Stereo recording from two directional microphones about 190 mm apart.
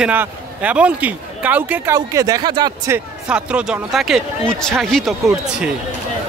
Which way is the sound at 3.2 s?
5° right (ahead or behind).